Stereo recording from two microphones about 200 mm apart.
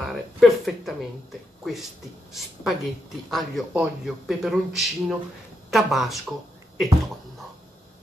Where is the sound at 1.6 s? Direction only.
Centre (ahead or behind).